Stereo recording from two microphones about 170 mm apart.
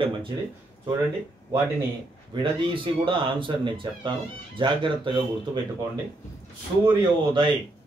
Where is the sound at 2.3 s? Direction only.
30° right (ahead or behind).